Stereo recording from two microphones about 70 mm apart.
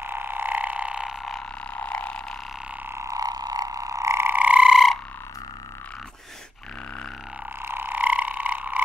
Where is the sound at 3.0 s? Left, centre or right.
Right.